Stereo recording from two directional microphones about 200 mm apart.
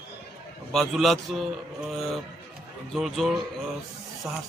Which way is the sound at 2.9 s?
Centre (ahead or behind).